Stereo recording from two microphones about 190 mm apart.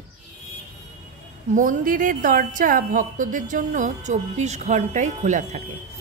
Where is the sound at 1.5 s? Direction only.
45° right (ahead or behind).